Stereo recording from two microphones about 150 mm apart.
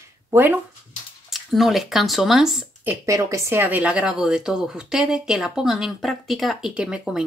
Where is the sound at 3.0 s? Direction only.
20° right (ahead or behind).